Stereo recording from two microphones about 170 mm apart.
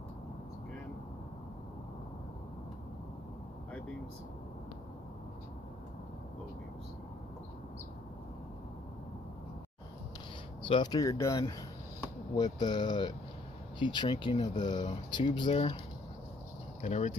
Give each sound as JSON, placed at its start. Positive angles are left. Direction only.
{"t": 10.7, "sound": "speech", "side_deg": 25}
{"t": 16.8, "sound": "speech", "side_deg": 45}